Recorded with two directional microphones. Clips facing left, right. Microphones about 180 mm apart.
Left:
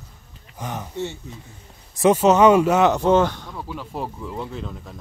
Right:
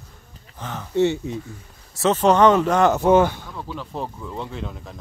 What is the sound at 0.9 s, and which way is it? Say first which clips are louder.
Speech: right 15 dB; 80° right.